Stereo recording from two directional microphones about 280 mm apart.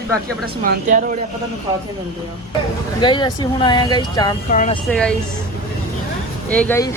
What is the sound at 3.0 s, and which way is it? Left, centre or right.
Speech, centre.